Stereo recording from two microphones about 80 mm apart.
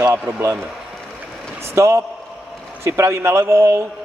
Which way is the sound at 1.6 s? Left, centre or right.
Right.